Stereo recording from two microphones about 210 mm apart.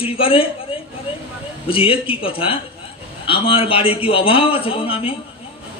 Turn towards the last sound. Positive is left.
turn(degrees=25)  # may be behind; listen again after turning